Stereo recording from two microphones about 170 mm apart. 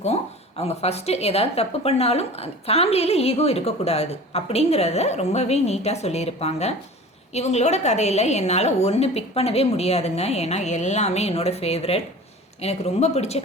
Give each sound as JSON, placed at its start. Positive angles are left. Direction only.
{"t": 0.0, "sound": "a woman's voice", "side_deg": 40}